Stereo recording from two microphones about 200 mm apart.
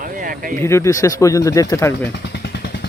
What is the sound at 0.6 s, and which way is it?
Speech, 15° left (ahead or behind).